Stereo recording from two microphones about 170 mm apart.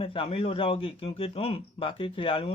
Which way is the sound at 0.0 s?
30° left (ahead or behind).